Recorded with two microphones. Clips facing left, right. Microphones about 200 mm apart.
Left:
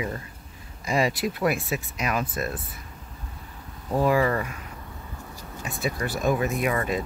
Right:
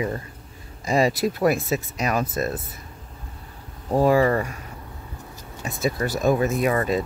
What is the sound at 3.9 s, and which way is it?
Speech, 35° right (ahead or behind).